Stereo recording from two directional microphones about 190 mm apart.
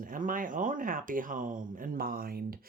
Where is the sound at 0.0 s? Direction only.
45° right (ahead or behind).